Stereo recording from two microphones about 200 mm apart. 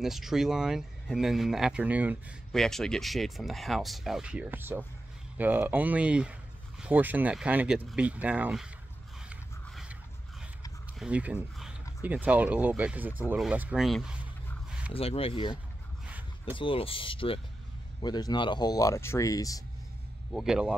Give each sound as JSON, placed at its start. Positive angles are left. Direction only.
{"t": 0.0, "sound": "speech", "side_deg": 0}
{"t": 9.3, "sound": "a sound", "side_deg": -5}
{"t": 11.0, "sound": "speech", "side_deg": -5}
{"t": 14.9, "sound": "speech", "side_deg": 30}
{"t": 20.3, "sound": "speech", "side_deg": -5}